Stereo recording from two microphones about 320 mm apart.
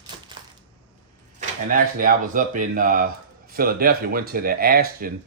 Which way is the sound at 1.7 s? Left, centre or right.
Right.